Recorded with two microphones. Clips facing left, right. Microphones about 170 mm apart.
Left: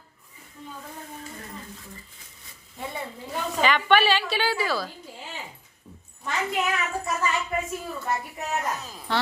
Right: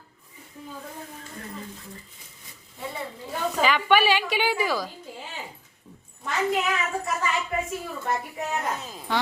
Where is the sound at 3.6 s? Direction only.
5° right (ahead or behind).